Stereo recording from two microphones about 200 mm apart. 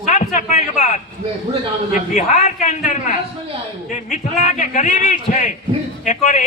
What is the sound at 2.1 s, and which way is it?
Speech, 35° left (ahead or behind).